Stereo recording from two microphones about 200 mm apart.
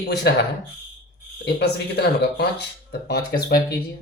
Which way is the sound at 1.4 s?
55° left (ahead or behind).